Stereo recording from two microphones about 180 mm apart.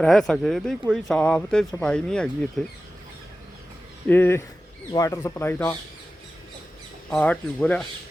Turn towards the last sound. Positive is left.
turn(degrees=5)  # may be behind; listen again after turning